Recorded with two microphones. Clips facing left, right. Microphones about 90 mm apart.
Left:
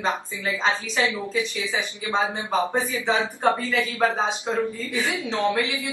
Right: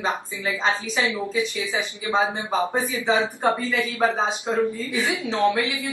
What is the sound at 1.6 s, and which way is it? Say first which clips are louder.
Speech: right 1 dB; 20° right (ahead or behind).